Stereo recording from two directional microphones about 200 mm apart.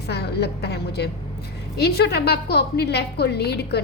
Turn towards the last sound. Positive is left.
turn(degrees=55)  # may be behind; listen again after turning